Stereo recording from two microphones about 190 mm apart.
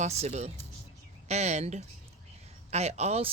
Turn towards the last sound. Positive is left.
turn(degrees=-35)  # may be behind; listen again after turning